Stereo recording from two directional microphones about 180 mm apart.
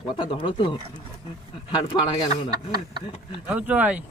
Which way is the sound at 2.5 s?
25° right (ahead or behind).